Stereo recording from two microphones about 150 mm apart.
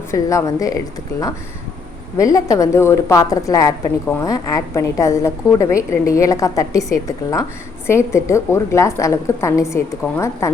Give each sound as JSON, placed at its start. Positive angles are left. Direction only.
{"t": 0.1, "sound": "a woman's voice", "side_deg": 20}
{"t": 2.1, "sound": "a woman's voice", "side_deg": 25}